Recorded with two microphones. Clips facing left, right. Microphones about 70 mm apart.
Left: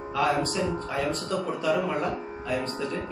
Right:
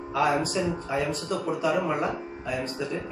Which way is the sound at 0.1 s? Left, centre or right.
Centre.